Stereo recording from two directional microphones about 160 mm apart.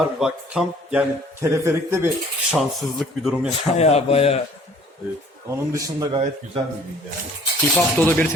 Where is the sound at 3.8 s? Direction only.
40° left (ahead or behind).